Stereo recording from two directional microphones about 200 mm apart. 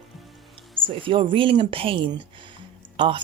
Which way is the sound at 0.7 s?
25° right (ahead or behind).